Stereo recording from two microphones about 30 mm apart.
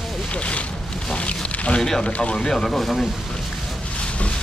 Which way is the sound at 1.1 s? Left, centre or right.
Left.